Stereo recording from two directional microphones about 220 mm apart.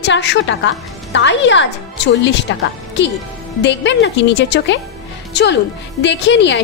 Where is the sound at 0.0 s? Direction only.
50° left (ahead or behind).